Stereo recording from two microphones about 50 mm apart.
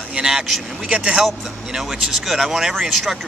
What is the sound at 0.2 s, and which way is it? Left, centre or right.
Vehicle, centre.